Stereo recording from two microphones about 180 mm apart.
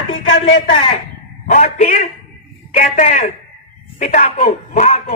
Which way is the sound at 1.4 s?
45° left (ahead or behind).